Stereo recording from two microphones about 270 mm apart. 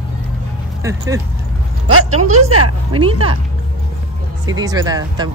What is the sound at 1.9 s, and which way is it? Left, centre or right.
Speech, right.